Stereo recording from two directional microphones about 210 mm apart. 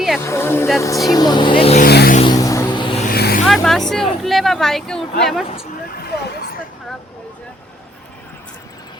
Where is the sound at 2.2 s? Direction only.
20° left (ahead or behind).